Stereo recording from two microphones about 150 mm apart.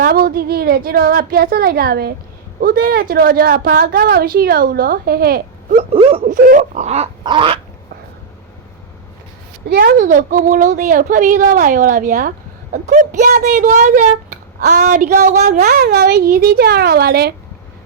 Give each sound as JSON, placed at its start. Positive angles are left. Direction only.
{"t": 0.0, "sound": "a woman's voice", "side_deg": -85}
{"t": 5.7, "sound": "a sound", "side_deg": -40}
{"t": 6.2, "sound": "a woman's voice", "side_deg": -65}
{"t": 7.3, "sound": "a sound", "side_deg": -35}
{"t": 9.6, "sound": "a woman's voice", "side_deg": -80}
{"t": 15.6, "sound": "a woman's voice", "side_deg": -85}